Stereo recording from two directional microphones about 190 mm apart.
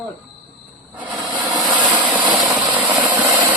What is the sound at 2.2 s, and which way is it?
Engine, 25° right (ahead or behind).